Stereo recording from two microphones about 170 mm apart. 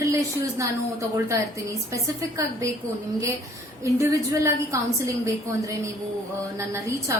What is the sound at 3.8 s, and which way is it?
A woman's voice, 15° right (ahead or behind).